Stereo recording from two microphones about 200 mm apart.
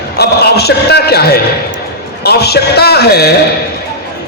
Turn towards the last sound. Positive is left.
turn(degrees=55)  # may be behind; listen again after turning